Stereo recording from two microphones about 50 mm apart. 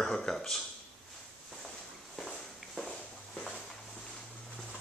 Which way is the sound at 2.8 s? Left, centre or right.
Centre.